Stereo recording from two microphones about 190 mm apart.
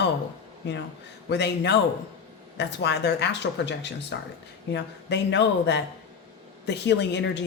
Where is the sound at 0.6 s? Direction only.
65° left (ahead or behind).